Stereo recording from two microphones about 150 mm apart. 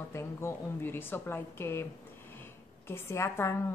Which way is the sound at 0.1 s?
15° left (ahead or behind).